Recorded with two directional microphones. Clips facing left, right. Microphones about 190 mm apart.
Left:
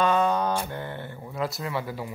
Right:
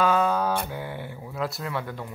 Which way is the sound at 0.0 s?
5° right (ahead or behind).